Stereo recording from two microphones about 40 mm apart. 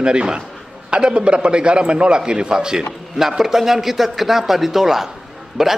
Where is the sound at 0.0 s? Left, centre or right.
Right.